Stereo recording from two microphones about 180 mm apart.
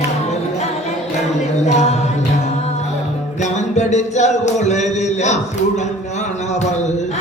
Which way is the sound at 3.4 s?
40° left (ahead or behind).